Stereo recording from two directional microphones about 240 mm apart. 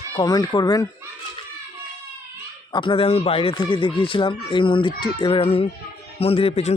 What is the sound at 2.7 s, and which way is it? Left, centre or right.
Speech, centre.